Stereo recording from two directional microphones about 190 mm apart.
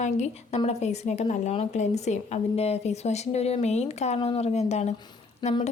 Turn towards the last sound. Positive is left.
turn(degrees=20)  # may be behind; listen again after turning